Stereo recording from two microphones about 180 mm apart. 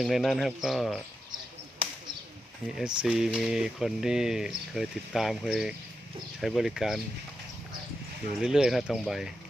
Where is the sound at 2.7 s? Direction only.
5° right (ahead or behind).